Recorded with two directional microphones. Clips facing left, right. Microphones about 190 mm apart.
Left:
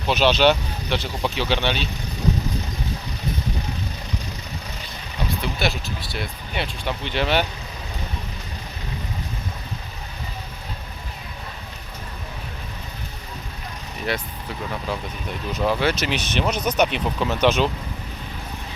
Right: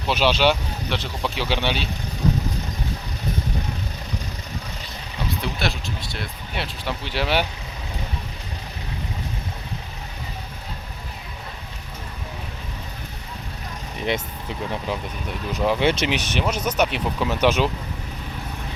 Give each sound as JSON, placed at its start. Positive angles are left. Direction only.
{"t": 0.1, "sound": "speech", "side_deg": -10}
{"t": 5.4, "sound": "speech", "side_deg": 0}
{"t": 14.7, "sound": "speech", "side_deg": -15}